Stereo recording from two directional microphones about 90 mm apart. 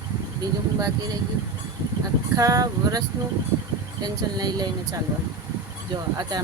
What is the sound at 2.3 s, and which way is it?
Speech, 40° right (ahead or behind).